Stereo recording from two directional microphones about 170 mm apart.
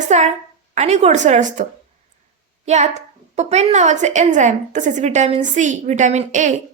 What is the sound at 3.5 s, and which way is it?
A woman's voice, 40° right (ahead or behind).